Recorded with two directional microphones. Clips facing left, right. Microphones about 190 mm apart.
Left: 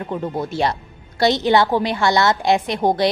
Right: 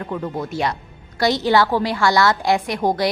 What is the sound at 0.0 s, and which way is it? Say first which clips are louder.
A woman's voice: left 1 dB; 25° left (ahead or behind).